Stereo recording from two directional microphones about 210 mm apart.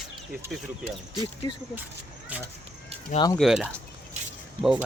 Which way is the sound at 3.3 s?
Centre (ahead or behind).